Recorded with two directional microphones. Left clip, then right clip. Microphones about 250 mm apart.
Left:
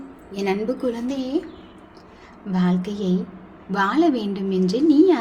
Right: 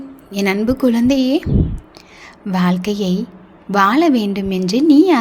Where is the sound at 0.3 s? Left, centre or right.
Right.